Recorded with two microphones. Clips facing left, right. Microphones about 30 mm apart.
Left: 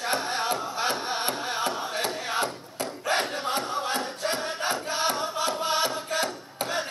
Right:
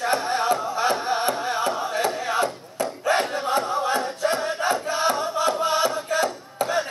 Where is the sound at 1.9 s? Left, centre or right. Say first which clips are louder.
Right 5 dB; left.